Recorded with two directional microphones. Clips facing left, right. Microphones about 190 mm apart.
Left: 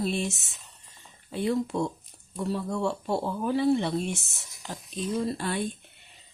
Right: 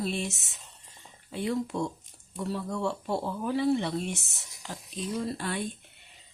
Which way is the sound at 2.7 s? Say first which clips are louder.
Left 1 dB; 30° left (ahead or behind).